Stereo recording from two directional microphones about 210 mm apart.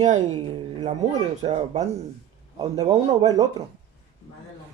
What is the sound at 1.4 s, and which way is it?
Speech, 30° right (ahead or behind).